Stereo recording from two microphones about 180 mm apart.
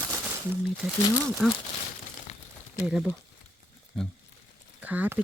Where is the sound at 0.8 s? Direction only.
10° right (ahead or behind).